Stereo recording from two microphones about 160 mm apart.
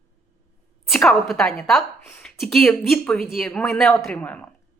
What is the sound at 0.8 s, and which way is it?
A woman's voice, centre (ahead or behind).